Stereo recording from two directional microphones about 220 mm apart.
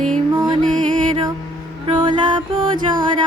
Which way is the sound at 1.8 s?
20° right (ahead or behind).